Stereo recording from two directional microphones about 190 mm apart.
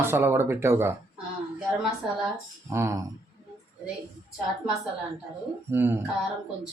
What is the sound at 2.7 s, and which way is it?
Speech, 15° right (ahead or behind).